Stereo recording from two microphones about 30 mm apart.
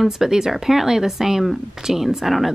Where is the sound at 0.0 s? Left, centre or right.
Centre.